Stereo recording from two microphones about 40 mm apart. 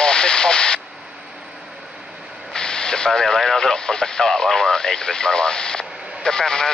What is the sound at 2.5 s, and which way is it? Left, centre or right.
Vehicle, centre.